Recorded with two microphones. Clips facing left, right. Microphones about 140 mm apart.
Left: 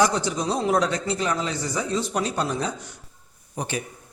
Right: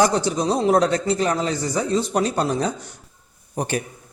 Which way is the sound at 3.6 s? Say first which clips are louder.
Right 5 dB; 45° right (ahead or behind).